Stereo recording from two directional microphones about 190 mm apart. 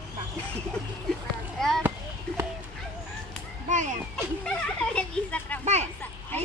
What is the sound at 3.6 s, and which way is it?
Speech, 40° right (ahead or behind).